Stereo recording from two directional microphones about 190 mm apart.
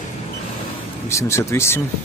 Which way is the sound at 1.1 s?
15° left (ahead or behind).